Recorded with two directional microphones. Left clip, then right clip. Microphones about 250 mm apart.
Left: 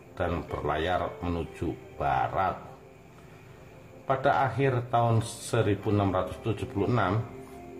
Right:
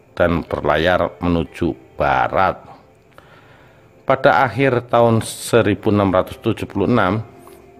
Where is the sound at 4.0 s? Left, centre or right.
Right.